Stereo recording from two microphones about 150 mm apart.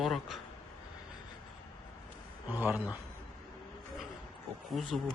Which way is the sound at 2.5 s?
15° right (ahead or behind).